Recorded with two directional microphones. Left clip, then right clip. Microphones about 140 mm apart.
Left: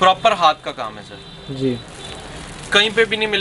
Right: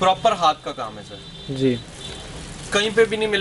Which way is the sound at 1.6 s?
5° right (ahead or behind).